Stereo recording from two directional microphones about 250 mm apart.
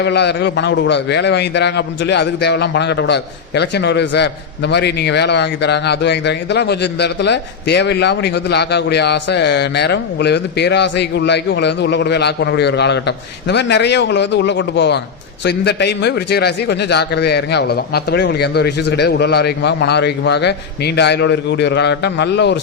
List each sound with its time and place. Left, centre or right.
0.0 s a man's voice: left